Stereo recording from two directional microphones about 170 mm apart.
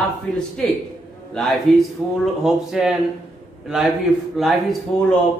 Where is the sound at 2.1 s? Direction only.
Centre (ahead or behind).